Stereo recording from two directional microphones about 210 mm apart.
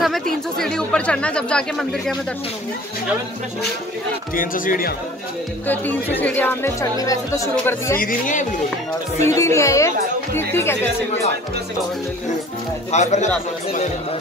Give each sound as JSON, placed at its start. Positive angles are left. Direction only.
{"t": 0.0, "sound": "speech", "side_deg": 0}
{"t": 4.4, "sound": "speech", "side_deg": 40}
{"t": 5.7, "sound": "speech", "side_deg": 10}
{"t": 8.0, "sound": "speech", "side_deg": 40}
{"t": 9.2, "sound": "speech", "side_deg": 15}
{"t": 12.9, "sound": "speech", "side_deg": 35}